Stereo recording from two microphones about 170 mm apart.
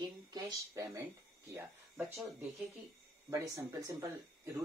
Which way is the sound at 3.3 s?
15° right (ahead or behind).